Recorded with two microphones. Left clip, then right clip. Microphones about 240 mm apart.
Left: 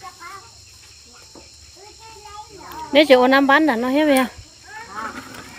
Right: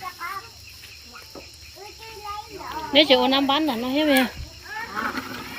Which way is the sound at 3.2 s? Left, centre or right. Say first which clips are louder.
Left 6 dB; left.